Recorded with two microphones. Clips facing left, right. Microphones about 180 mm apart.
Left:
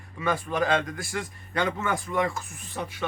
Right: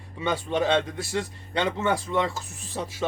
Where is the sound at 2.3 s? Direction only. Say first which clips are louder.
Even; 90° right.